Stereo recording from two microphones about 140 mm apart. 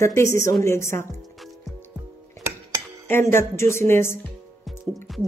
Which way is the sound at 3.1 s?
15° left (ahead or behind).